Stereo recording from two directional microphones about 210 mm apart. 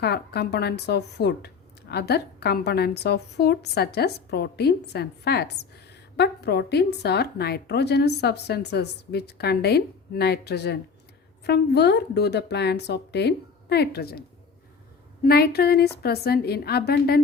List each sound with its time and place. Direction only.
0.0 s a woman's voice: 50° left (ahead or behind)